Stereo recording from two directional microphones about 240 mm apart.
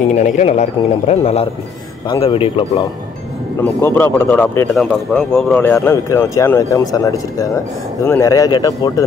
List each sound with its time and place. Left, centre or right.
0.1 s a man's voice: left
3.6 s speech: centre